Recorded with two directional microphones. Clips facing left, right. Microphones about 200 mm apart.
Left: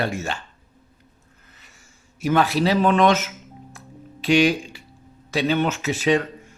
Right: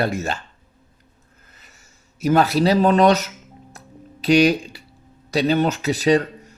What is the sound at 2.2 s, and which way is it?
Speech, 40° right (ahead or behind).